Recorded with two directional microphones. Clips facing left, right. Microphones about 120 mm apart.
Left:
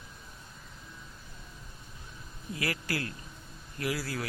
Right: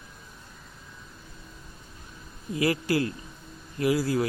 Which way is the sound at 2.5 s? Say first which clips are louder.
Right 10 dB; 20° right (ahead or behind).